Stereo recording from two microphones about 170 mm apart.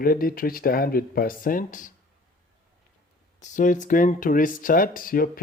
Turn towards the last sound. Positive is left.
turn(degrees=55)  # may be behind; listen again after turning